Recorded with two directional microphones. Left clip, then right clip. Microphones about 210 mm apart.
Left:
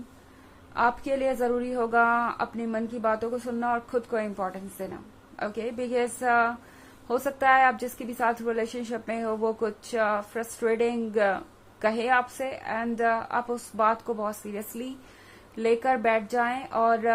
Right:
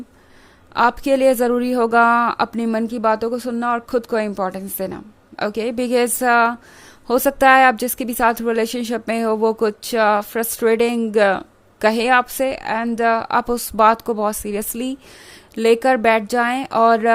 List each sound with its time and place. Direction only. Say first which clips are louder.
0.7 s a woman's voice: right 9 dB; 50° right (ahead or behind)